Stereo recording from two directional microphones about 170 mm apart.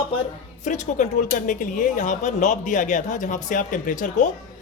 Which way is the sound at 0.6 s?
45° left (ahead or behind).